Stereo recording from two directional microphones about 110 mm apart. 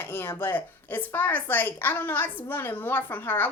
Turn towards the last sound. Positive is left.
turn(degrees=20)  # may be behind; listen again after turning